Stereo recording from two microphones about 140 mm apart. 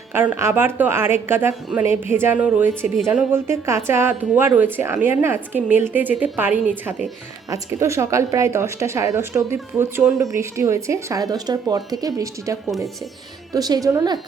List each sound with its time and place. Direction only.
0.1 s a woman's voice: 15° right (ahead or behind)